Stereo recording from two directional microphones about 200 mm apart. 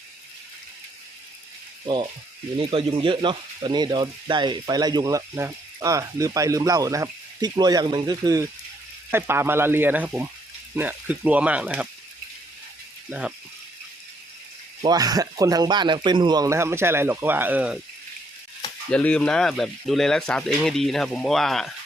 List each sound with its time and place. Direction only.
2.6 s speech: 25° right (ahead or behind); by 11.9 s 5° right (ahead or behind)
13.1 s speech: 5° right (ahead or behind)
14.8 s speech: 20° right (ahead or behind)
18.9 s speech: 5° left (ahead or behind)